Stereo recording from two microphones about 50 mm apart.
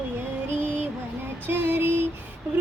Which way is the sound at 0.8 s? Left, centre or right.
Right.